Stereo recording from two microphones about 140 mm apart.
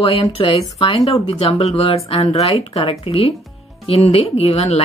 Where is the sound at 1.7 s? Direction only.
45° left (ahead or behind).